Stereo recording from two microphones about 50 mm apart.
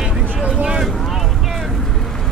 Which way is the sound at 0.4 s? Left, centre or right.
Centre.